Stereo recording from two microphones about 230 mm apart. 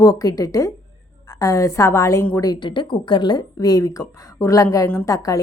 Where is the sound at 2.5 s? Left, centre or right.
Centre.